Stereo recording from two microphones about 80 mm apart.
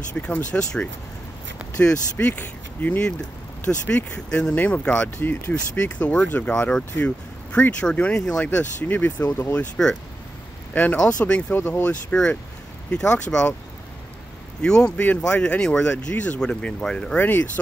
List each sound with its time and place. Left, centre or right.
0.1 s speech: centre
10.7 s speech: left
11.5 s speech: left
12.1 s speech: centre
14.6 s speech: centre